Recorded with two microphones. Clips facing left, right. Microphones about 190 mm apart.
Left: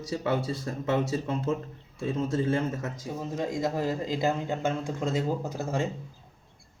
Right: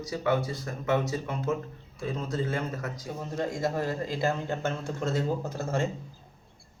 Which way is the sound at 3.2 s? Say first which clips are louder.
Even; 10° left (ahead or behind).